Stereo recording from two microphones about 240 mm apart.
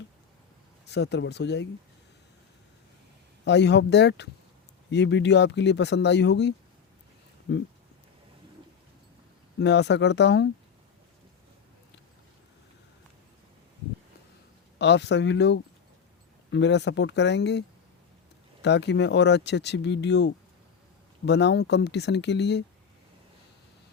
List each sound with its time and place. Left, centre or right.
0.9 s speech: left
3.4 s speech: left
9.6 s speech: left
14.8 s speech: left
18.6 s speech: left